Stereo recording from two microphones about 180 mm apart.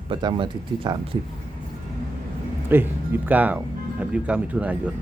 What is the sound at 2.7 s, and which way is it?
Speech, 10° right (ahead or behind).